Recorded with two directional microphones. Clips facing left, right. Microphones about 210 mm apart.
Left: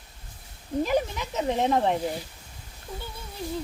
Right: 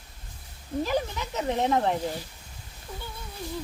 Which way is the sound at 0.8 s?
15° left (ahead or behind).